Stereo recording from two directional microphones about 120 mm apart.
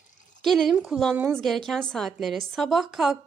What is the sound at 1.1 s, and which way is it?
Speech, 20° right (ahead or behind).